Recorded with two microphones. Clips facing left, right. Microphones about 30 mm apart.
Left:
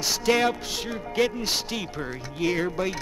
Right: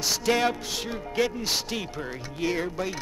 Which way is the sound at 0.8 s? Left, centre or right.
Centre.